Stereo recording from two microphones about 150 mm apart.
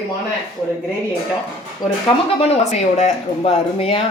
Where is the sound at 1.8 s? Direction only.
30° left (ahead or behind).